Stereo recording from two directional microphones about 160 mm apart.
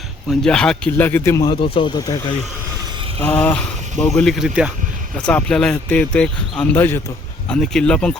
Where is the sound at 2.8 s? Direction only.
30° right (ahead or behind).